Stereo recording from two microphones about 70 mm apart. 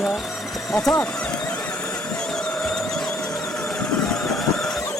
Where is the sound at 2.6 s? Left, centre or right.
Centre.